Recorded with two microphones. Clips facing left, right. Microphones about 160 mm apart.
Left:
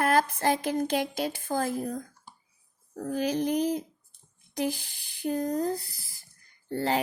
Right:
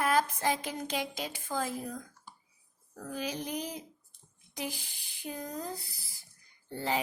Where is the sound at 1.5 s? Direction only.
40° left (ahead or behind).